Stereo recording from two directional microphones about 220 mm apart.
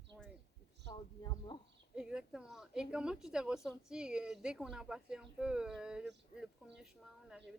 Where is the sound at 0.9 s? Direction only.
20° left (ahead or behind).